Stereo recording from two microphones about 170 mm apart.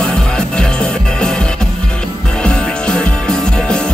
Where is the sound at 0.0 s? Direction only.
5° left (ahead or behind).